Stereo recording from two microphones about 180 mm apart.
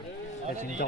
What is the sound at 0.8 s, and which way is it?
Speech, 50° left (ahead or behind).